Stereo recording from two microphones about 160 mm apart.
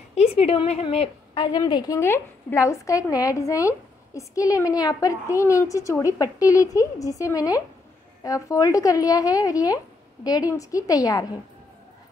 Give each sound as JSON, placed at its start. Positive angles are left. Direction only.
{"t": 0.1, "sound": "a woman's voice", "side_deg": 40}
{"t": 1.6, "sound": "a woman's voice", "side_deg": 25}